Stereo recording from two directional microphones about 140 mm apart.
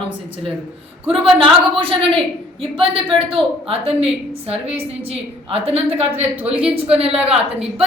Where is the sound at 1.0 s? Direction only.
40° right (ahead or behind).